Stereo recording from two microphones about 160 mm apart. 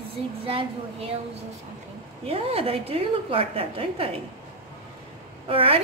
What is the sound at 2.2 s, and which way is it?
A woman's voice, 35° right (ahead or behind).